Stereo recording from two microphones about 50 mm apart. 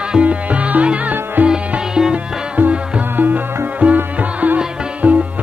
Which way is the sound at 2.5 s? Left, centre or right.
Right.